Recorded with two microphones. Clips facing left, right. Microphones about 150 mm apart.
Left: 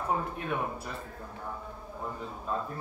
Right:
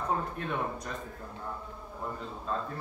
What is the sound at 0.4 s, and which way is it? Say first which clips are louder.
Speech: even; 10° left (ahead or behind).